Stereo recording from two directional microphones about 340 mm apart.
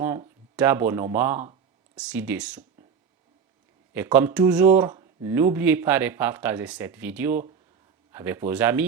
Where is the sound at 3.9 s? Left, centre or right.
Centre.